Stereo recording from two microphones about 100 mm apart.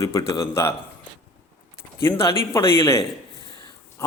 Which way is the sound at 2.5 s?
30° left (ahead or behind).